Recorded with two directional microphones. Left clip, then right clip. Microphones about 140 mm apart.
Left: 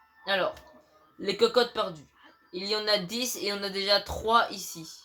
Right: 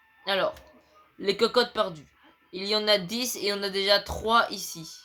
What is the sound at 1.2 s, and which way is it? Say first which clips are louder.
Speech: right 1 dB; 45° right (ahead or behind).